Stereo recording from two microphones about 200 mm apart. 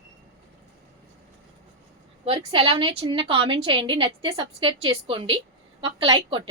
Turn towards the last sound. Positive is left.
turn(degrees=-25)  # may be behind; listen again after turning